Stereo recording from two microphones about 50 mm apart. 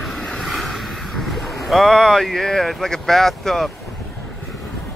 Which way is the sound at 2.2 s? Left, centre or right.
Centre.